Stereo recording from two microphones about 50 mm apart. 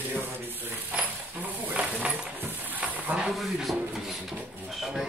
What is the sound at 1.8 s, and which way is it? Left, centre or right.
Coin, right.